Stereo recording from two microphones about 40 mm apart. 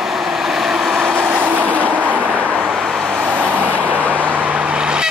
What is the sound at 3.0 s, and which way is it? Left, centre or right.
Vehicle, right.